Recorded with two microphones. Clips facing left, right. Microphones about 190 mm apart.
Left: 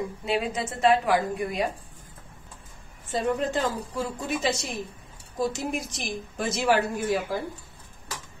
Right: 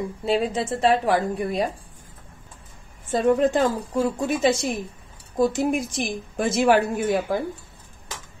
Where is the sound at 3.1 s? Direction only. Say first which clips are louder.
Right 7 dB; 50° right (ahead or behind).